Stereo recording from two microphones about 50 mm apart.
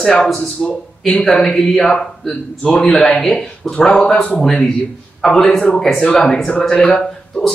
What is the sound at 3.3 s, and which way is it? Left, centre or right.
Speech, left.